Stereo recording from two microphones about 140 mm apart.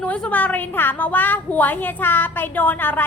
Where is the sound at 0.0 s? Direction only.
10° left (ahead or behind).